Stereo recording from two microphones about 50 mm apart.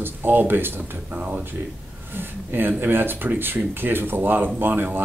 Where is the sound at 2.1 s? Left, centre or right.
Right.